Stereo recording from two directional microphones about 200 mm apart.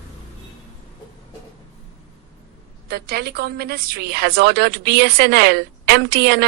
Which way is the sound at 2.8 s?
55° right (ahead or behind).